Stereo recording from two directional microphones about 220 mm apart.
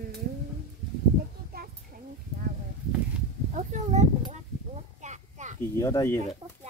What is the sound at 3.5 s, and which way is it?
Speech, 30° right (ahead or behind).